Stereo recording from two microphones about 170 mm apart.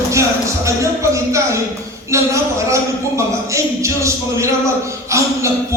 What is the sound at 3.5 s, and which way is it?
A man's voice, 15° right (ahead or behind).